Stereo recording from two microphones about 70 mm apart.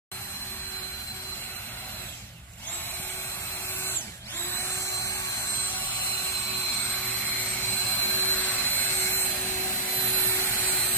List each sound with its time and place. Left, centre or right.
5.6 s vehicle: left
10.0 s vacuum cleaner: left